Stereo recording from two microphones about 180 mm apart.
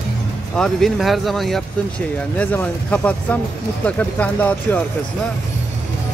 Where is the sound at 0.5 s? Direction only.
5° left (ahead or behind).